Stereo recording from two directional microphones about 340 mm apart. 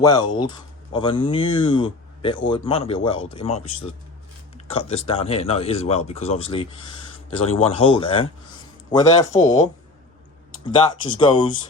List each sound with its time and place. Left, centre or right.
0.0 s speech: centre
4.7 s speech: centre
11.0 s speech: centre